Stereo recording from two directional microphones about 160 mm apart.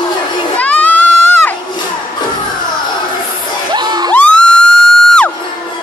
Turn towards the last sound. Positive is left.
turn(degrees=5)  # may be behind; listen again after turning